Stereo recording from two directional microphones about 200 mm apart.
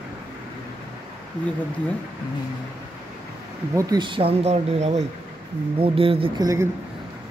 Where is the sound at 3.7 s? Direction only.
20° right (ahead or behind).